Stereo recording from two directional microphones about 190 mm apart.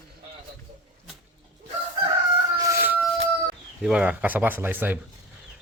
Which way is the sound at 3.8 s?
5° right (ahead or behind).